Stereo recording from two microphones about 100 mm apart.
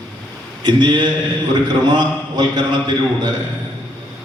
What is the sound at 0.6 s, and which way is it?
A man's voice, 45° right (ahead or behind).